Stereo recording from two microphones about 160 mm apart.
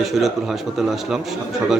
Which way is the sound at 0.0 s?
Centre (ahead or behind).